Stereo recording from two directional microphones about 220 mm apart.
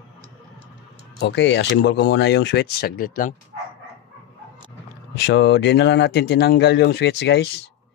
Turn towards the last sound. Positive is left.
turn(degrees=50)  # may be behind; listen again after turning